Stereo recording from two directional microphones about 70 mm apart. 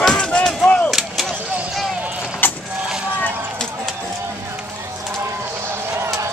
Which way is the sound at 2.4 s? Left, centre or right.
Left.